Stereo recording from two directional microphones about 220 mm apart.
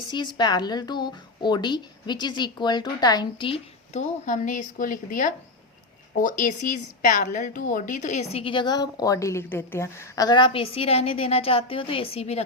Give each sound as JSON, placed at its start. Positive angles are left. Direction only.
{"t": 0.1, "sound": "a woman's voice", "side_deg": 20}